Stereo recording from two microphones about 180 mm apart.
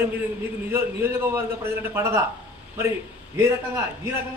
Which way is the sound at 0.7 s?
10° right (ahead or behind).